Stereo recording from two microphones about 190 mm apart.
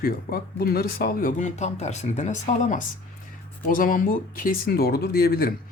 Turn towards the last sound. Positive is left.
turn(degrees=50)  # may be behind; listen again after turning